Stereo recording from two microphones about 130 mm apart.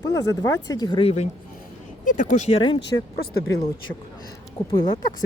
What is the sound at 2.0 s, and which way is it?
Speech, 90° left.